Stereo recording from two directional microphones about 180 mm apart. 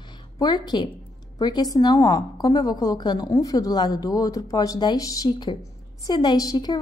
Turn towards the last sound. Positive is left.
turn(degrees=20)  # may be behind; listen again after turning